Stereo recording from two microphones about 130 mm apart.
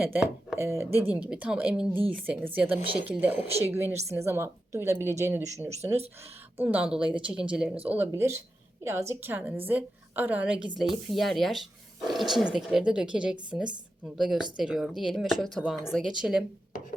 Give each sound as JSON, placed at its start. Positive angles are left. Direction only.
{"t": 0.0, "sound": "a woman's voice", "side_deg": -15}
{"t": 6.6, "sound": "a woman's voice", "side_deg": -10}